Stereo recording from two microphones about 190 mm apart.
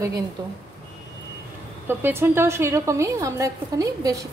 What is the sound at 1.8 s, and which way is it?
A woman's voice, 10° right (ahead or behind).